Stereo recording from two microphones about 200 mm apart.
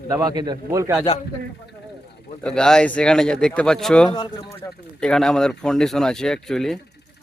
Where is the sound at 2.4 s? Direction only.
5° left (ahead or behind).